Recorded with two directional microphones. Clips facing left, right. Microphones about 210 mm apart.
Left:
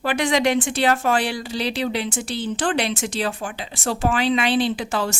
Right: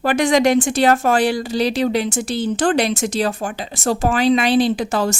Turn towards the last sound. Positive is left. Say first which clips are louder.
# right 5 dB
turn(degrees=-40)  # may be behind; listen again after turning